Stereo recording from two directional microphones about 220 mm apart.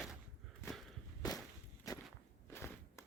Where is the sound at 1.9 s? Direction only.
15° left (ahead or behind).